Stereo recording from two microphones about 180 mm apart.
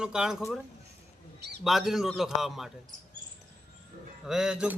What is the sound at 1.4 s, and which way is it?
Bird, 65° right (ahead or behind).